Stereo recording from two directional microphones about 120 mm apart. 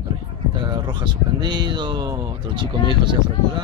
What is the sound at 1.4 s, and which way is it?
Speech, 40° right (ahead or behind).